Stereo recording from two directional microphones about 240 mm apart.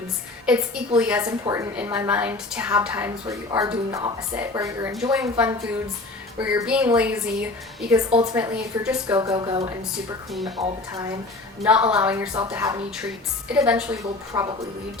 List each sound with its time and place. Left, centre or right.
0.4 s a woman's voice: centre
7.9 s speech: centre
8.4 s a woman's voice: centre
9.1 s a woman's voice: centre
11.6 s a woman's voice: centre